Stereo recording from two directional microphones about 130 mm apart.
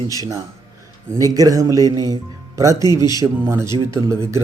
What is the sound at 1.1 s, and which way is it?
Speech, 25° right (ahead or behind).